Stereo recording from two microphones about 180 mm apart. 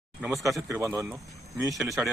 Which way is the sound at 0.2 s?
5° right (ahead or behind).